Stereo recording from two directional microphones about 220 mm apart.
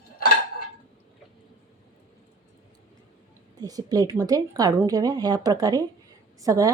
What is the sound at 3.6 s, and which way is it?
A woman's voice, 15° right (ahead or behind).